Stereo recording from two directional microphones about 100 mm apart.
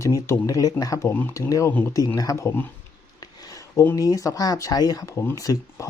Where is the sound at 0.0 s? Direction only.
30° left (ahead or behind).